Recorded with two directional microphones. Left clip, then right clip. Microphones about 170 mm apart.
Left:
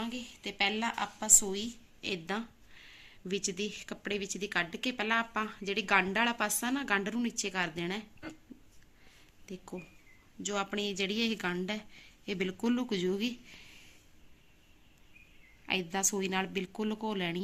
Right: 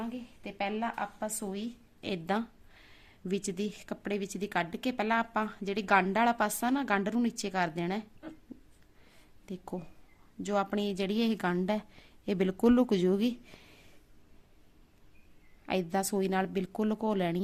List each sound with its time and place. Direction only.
0.0 s a woman's voice: 40° right (ahead or behind); by 8.0 s 80° right
8.2 s a sound: 10° left (ahead or behind)
9.5 s a woman's voice: 80° right; by 13.7 s 65° right (ahead or behind)
15.6 s speech: 55° right (ahead or behind)